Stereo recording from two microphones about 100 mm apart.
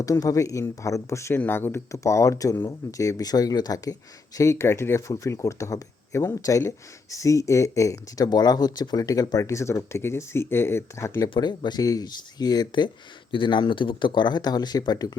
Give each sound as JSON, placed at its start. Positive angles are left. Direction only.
{"t": 0.0, "sound": "speech", "side_deg": 35}
{"t": 4.4, "sound": "speech", "side_deg": 30}
{"t": 11.3, "sound": "speech", "side_deg": 45}